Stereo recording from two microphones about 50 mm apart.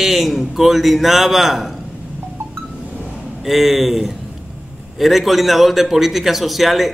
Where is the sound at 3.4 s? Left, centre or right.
Centre.